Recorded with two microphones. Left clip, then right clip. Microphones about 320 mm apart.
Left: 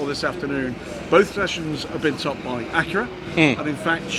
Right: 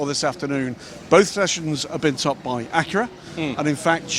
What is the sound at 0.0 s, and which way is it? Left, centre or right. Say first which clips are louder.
A man's voice: right 1 dB; right.